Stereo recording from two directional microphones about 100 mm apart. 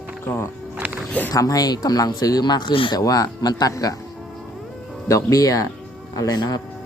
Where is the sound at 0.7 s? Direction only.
15° right (ahead or behind).